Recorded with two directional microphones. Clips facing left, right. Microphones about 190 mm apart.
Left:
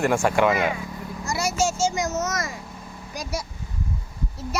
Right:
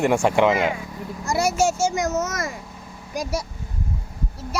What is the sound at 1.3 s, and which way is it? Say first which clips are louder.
A child's voice: right 4 dB; 55° right (ahead or behind).